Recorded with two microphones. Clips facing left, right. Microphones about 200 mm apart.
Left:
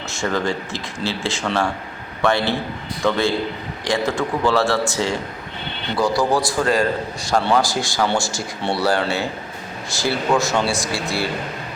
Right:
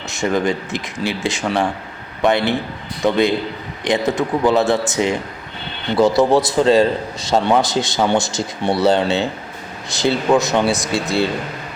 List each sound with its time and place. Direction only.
0.1 s speech: 15° right (ahead or behind)